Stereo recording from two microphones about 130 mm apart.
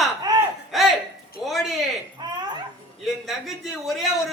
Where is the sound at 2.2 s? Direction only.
35° right (ahead or behind).